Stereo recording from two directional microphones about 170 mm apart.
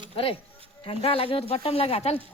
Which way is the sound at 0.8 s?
35° left (ahead or behind).